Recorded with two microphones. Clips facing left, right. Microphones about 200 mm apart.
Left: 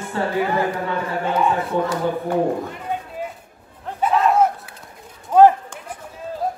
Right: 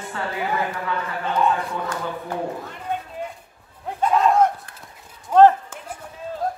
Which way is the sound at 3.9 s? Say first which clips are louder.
Left 1 dB; 5° left (ahead or behind).